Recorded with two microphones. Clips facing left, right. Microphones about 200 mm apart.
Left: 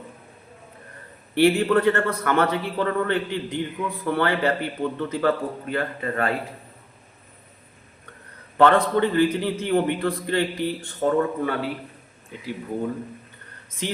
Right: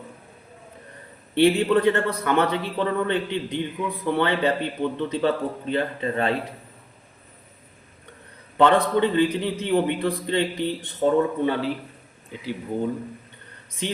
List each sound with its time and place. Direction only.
1.4 s a man's voice: 15° right (ahead or behind)
8.5 s a man's voice: 20° right (ahead or behind)
13.8 s a man's voice: 20° right (ahead or behind)